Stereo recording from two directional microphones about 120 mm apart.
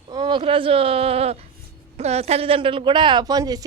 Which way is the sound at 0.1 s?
40° right (ahead or behind).